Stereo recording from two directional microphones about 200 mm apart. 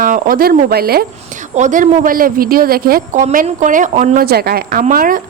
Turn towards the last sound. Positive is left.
turn(degrees=-45)  # may be behind; listen again after turning